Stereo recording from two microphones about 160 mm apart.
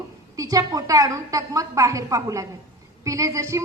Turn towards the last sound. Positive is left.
turn(degrees=-20)  # may be behind; listen again after turning